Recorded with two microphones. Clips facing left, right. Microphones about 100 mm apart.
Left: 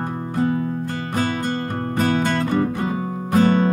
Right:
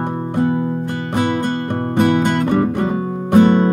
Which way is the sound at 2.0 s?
15° right (ahead or behind).